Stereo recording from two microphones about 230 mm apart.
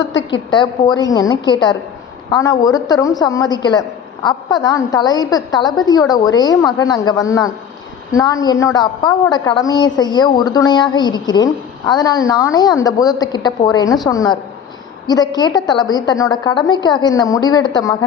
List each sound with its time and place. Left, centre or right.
0.0 s a woman's voice: left
0.5 s a woman's voice: centre